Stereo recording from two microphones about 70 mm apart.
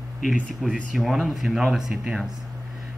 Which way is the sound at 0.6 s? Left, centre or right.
Centre.